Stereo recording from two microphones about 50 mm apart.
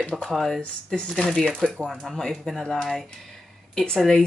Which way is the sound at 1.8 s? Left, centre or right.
Centre.